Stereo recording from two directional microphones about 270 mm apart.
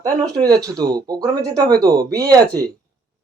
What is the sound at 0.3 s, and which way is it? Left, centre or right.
Speech, centre.